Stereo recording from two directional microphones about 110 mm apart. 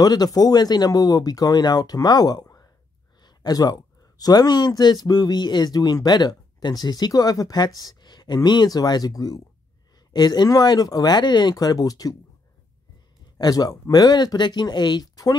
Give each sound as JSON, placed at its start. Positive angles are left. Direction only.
{"t": 0.0, "sound": "speech", "side_deg": 35}
{"t": 13.4, "sound": "speech", "side_deg": 35}